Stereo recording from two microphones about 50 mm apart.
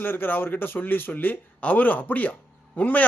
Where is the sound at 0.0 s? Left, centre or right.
Left.